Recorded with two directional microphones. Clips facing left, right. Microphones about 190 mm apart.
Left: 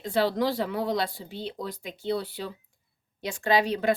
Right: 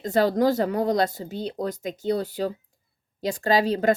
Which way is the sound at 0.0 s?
45° right (ahead or behind).